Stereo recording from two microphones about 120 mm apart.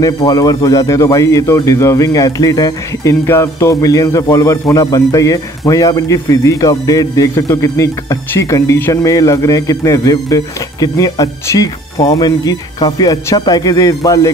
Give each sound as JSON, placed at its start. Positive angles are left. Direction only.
{"t": 0.0, "sound": "speech", "side_deg": 30}